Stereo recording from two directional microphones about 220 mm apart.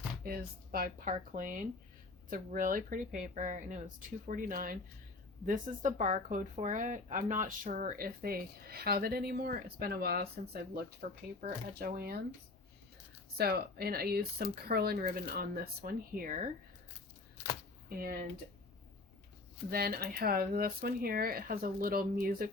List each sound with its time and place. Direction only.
0.3 s speech: 40° right (ahead or behind)
13.3 s speech: 45° right (ahead or behind)
17.8 s speech: 40° right (ahead or behind)
19.7 s speech: 45° right (ahead or behind)